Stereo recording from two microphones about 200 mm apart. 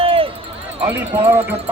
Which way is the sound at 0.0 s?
30° right (ahead or behind).